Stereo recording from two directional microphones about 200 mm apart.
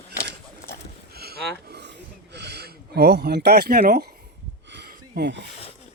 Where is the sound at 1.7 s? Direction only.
60° right (ahead or behind).